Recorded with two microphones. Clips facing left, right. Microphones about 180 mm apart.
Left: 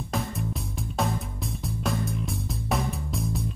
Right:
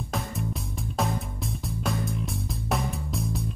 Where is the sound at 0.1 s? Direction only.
Centre (ahead or behind).